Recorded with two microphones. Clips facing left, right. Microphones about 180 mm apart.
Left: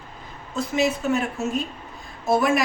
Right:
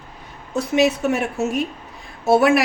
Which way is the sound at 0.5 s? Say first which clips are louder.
Right 5 dB; 70° right (ahead or behind).